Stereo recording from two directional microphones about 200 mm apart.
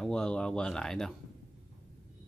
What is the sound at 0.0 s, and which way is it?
Speech, 5° left (ahead or behind).